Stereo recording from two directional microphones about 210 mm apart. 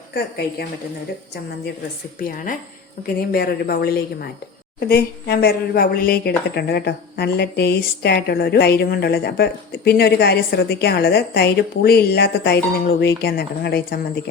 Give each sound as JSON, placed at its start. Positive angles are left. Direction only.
{"t": 3.2, "sound": "a woman's voice", "side_deg": 45}